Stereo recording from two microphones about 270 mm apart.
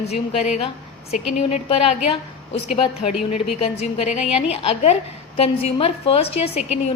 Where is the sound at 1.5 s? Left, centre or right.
Left.